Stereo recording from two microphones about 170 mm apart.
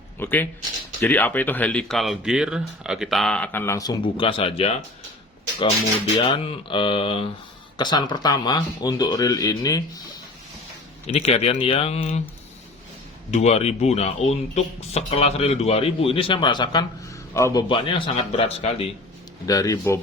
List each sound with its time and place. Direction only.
0.2 s speech: 10° left (ahead or behind)
4.0 s speech: 30° left (ahead or behind)
6.2 s speech: 35° left (ahead or behind)
11.0 s speech: 35° left (ahead or behind)
13.3 s speech: 40° left (ahead or behind)
19.5 s speech: 20° left (ahead or behind)